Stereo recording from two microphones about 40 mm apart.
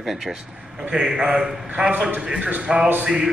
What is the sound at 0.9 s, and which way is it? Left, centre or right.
Speech, right.